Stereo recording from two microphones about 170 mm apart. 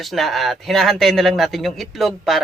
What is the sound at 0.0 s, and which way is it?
A man's voice, centre (ahead or behind).